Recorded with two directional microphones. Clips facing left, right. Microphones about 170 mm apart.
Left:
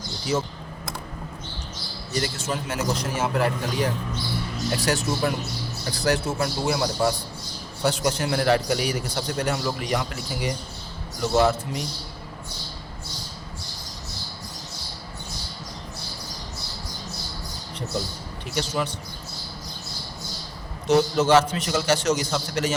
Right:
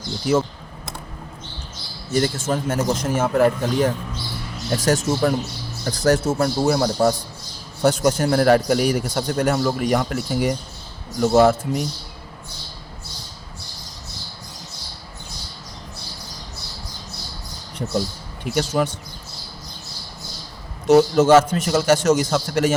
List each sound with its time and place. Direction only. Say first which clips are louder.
0.3 s a man's voice: right 6 dB; 50° right (ahead or behind)
2.2 s a man's voice: right 6 dB; 50° right (ahead or behind)
18.5 s a man's voice: right 6 dB; 50° right (ahead or behind)
20.8 s a man's voice: right 6 dB; 45° right (ahead or behind)